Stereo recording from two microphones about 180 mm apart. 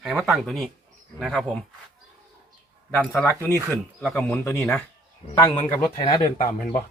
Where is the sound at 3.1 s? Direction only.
10° left (ahead or behind).